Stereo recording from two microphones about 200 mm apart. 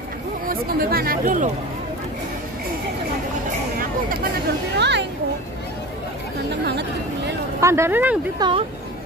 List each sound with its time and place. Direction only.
0.5 s speech: 50° right (ahead or behind)
3.7 s a sound: 45° right (ahead or behind)
4.7 s children playing: 60° right (ahead or behind)
7.6 s speech: 15° right (ahead or behind)
8.4 s speech: 25° right (ahead or behind)